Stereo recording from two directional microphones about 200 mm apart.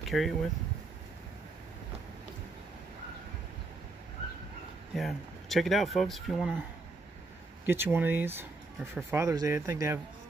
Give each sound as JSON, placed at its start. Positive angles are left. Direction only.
{"t": 0.1, "sound": "speech", "side_deg": 0}
{"t": 4.9, "sound": "speech", "side_deg": 0}
{"t": 7.6, "sound": "speech", "side_deg": -10}